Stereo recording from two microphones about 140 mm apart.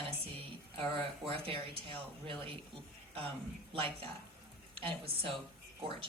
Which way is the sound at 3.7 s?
40° right (ahead or behind).